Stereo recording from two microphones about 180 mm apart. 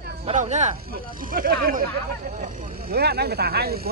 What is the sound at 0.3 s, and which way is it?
Speech, 40° right (ahead or behind).